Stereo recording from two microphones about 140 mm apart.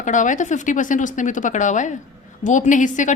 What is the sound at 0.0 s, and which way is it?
A woman's voice, 65° left (ahead or behind).